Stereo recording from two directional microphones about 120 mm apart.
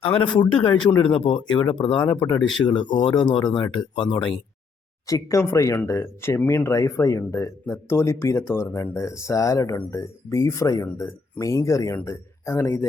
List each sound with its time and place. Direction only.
0.0 s speech: 45° left (ahead or behind)
5.0 s a man's voice: 25° left (ahead or behind)